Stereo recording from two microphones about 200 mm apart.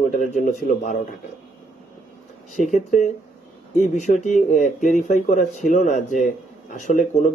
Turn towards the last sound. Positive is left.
turn(degrees=40)  # may be behind; listen again after turning